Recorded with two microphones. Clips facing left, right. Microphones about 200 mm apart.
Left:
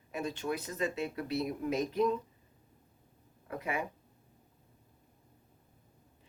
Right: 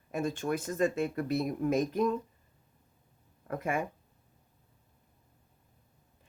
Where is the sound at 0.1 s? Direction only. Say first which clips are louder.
Right 4 dB; 50° right (ahead or behind).